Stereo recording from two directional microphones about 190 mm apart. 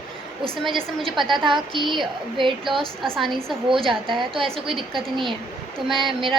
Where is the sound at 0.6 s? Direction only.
Centre (ahead or behind).